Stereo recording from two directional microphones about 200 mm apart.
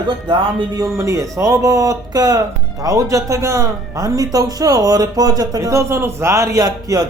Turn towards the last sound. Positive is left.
turn(degrees=-20)  # may be behind; listen again after turning